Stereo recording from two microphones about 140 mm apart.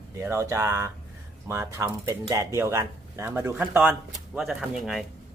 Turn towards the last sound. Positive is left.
turn(degrees=0)  # may be behind; listen again after turning